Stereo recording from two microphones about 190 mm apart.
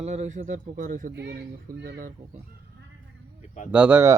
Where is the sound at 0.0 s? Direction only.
35° right (ahead or behind).